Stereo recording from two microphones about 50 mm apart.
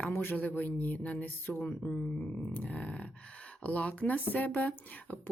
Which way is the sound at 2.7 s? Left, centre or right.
Left.